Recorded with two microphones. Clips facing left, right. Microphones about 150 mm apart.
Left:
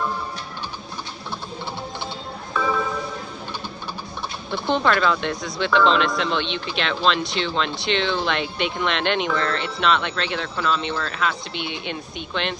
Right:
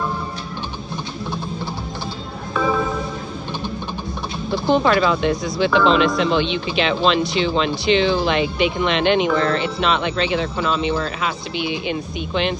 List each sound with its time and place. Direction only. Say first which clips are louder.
2.5 s music: right 3 dB; 20° right (ahead or behind)
4.5 s speech: right 4 dB; 5° right (ahead or behind)